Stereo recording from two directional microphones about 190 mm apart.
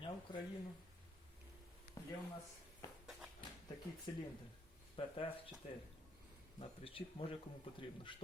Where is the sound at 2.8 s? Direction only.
20° left (ahead or behind).